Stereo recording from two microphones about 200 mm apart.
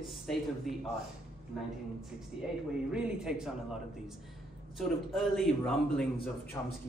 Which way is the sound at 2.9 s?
5° right (ahead or behind).